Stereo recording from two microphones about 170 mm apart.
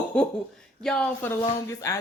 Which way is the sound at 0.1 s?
5° left (ahead or behind).